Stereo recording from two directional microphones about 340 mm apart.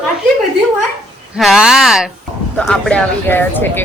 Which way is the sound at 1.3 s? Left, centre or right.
Centre.